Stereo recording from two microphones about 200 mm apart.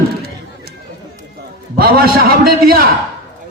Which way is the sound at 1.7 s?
45° right (ahead or behind).